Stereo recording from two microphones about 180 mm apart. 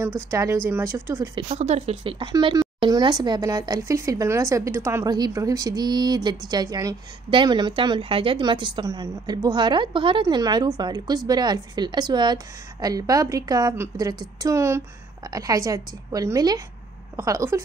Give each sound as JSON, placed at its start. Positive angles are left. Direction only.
{"t": 0.3, "sound": "speech", "side_deg": -15}
{"t": 1.3, "sound": "speech", "side_deg": -35}